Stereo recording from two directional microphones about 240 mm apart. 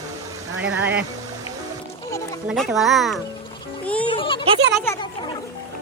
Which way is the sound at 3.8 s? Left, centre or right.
Centre.